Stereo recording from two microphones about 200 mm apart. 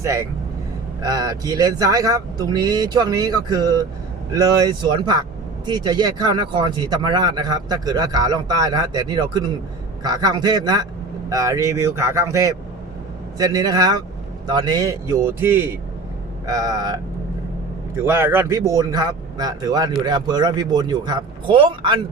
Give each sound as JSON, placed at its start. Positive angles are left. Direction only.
{"t": 0.0, "sound": "a man's voice", "side_deg": -15}